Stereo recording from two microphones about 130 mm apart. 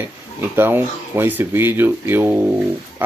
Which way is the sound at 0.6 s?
15° right (ahead or behind).